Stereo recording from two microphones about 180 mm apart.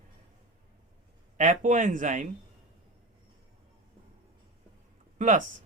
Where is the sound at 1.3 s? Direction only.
45° right (ahead or behind).